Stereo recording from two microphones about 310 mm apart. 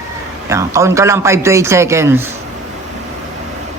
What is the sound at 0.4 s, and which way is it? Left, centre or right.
A man's voice, centre.